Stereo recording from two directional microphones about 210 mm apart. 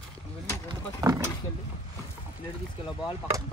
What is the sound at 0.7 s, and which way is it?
Speech, 15° right (ahead or behind).